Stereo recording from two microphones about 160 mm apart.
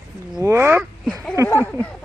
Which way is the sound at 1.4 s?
10° left (ahead or behind).